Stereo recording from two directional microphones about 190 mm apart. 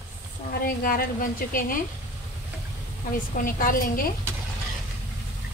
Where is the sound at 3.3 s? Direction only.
45° left (ahead or behind).